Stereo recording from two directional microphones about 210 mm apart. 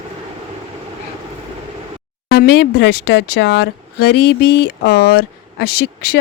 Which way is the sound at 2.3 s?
50° left (ahead or behind).